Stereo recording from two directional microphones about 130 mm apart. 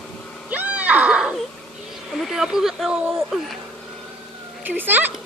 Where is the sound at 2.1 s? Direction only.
Centre (ahead or behind).